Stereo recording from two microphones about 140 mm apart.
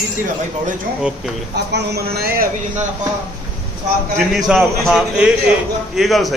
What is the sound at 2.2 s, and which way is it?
Speech, 90° right.